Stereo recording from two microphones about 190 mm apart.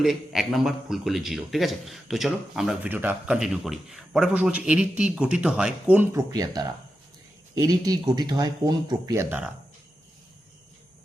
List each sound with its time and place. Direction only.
0.0 s a man's voice: centre (ahead or behind); by 9.2 s 20° right (ahead or behind)